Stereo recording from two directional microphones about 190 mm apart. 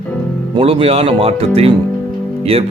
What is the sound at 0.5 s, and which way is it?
Speech, 30° right (ahead or behind).